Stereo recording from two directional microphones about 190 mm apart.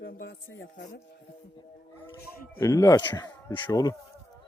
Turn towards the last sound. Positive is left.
turn(degrees=20)  # may be behind; listen again after turning